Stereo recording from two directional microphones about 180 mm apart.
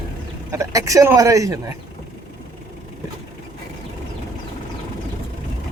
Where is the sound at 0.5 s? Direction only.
20° right (ahead or behind).